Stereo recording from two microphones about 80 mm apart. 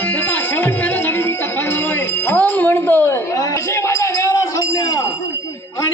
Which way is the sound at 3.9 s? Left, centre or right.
Left.